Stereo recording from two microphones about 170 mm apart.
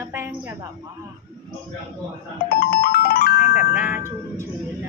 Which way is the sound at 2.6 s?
60° left (ahead or behind).